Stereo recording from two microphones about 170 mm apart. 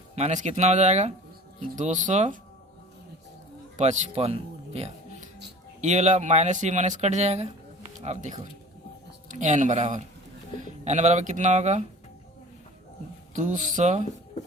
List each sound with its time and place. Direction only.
0.2 s speech: 45° right (ahead or behind)
3.8 s speech: 45° right (ahead or behind)
13.3 s speech: 50° right (ahead or behind)